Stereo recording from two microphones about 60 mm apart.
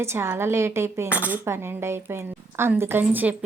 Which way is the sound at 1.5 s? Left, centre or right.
Right.